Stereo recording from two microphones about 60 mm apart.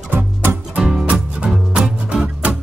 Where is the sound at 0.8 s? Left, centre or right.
Centre.